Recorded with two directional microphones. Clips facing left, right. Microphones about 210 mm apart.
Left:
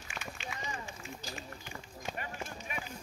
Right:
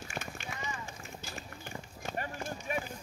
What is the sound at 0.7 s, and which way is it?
Run, 35° left (ahead or behind).